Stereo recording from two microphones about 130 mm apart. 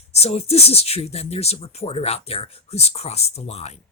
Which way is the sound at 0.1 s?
55° left (ahead or behind).